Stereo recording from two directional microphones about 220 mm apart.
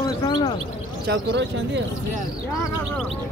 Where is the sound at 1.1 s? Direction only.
50° right (ahead or behind).